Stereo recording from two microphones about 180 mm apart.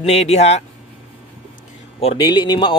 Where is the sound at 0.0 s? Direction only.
35° left (ahead or behind).